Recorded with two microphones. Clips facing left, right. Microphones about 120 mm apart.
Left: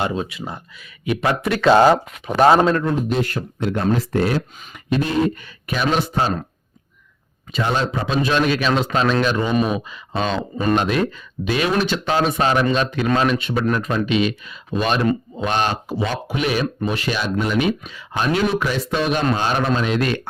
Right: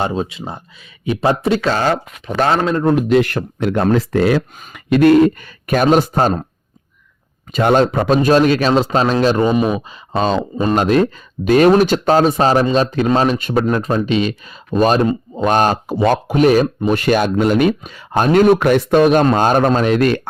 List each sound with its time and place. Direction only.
0.0 s speech: 30° right (ahead or behind)
1.9 s speech: 10° left (ahead or behind)
2.9 s speech: 80° right; by 6.4 s 45° right (ahead or behind)
7.5 s speech: 50° right (ahead or behind)